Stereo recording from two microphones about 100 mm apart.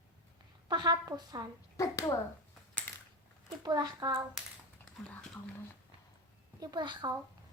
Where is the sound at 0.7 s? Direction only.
45° right (ahead or behind).